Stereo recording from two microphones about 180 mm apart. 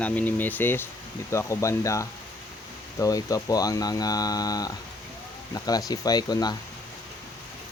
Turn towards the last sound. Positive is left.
turn(degrees=20)  # may be behind; listen again after turning